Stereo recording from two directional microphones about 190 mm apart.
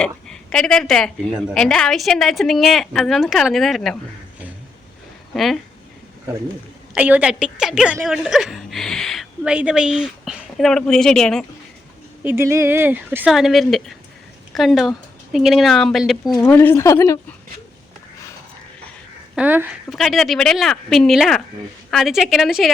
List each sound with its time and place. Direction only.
0.0 s a woman's voice: 5° left (ahead or behind)
5.3 s speech: centre (ahead or behind)
6.9 s a woman's voice: 5° right (ahead or behind)
12.2 s a woman's voice: 10° right (ahead or behind)
16.4 s speech: 10° left (ahead or behind)
19.4 s speech: 10° right (ahead or behind)
19.9 s a woman's voice: centre (ahead or behind)